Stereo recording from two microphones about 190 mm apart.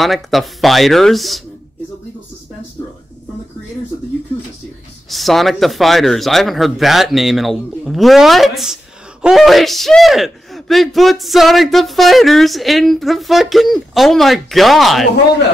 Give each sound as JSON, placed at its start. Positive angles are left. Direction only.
{"t": 0.0, "sound": "speech", "side_deg": 0}
{"t": 5.1, "sound": "speech", "side_deg": 0}